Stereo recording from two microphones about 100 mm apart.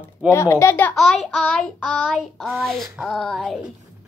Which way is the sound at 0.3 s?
25° left (ahead or behind).